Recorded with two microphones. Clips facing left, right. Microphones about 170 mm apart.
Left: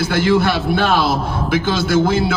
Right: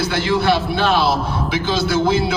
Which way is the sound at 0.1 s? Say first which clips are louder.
Left 3 dB; 50° left (ahead or behind).